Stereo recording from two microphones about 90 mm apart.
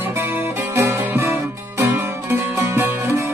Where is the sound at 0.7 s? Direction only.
30° right (ahead or behind).